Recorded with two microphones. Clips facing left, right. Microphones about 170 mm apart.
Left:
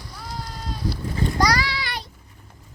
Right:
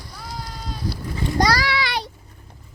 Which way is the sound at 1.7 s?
75° right (ahead or behind).